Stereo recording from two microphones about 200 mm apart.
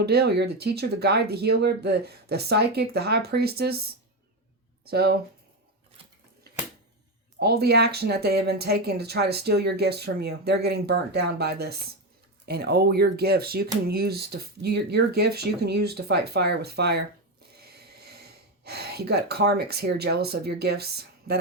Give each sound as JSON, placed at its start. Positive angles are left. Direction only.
{"t": 0.0, "sound": "speech", "side_deg": -55}
{"t": 7.3, "sound": "speech", "side_deg": -55}